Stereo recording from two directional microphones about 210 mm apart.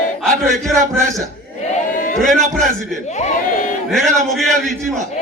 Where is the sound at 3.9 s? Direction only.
Centre (ahead or behind).